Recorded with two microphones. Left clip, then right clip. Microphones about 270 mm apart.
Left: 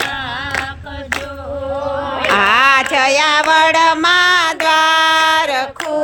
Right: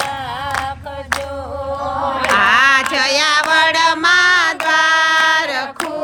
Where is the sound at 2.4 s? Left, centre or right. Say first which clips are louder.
Left 1 dB; left.